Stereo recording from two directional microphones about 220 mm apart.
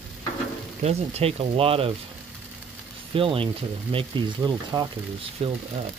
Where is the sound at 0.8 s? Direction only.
30° right (ahead or behind).